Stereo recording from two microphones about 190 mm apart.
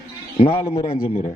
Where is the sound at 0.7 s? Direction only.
30° left (ahead or behind).